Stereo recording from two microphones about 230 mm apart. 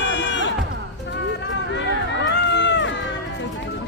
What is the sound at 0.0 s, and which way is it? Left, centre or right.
Music, left.